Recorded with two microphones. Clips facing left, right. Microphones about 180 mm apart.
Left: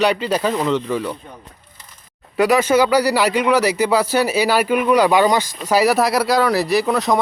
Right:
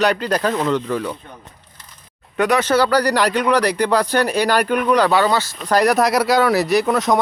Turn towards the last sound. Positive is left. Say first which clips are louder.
# right 1 dB
turn(degrees=0)  # may be behind; listen again after turning